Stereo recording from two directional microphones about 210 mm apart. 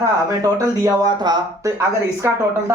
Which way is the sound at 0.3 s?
15° right (ahead or behind).